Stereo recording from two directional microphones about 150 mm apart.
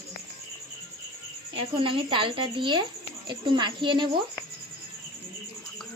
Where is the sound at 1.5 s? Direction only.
35° right (ahead or behind).